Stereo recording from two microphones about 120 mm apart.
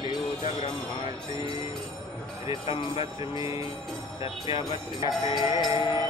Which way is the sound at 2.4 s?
50° left (ahead or behind).